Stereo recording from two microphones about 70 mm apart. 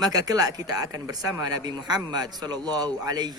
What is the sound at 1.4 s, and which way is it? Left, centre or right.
A man's voice, right.